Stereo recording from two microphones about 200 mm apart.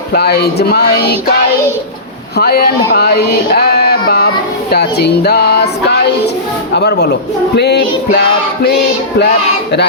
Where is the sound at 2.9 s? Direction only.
55° left (ahead or behind).